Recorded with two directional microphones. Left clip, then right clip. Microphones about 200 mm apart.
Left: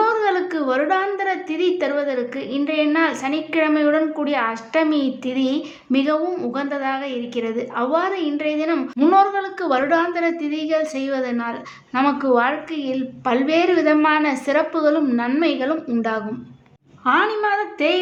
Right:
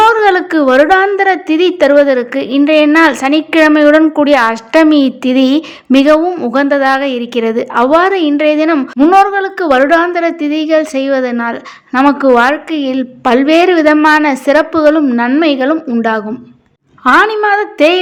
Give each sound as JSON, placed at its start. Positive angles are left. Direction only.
{"t": 0.0, "sound": "a woman's voice", "side_deg": -45}